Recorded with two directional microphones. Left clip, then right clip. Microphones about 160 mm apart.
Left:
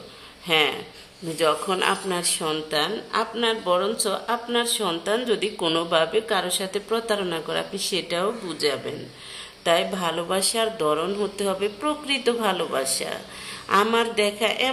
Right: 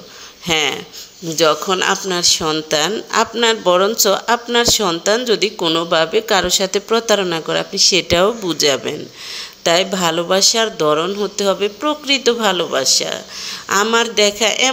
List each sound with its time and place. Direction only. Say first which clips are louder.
0.5 s speech: right 4 dB; 35° right (ahead or behind)
2.7 s speech: right 8 dB; 40° right (ahead or behind)